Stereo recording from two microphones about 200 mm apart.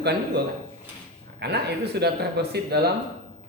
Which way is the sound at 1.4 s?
55° right (ahead or behind).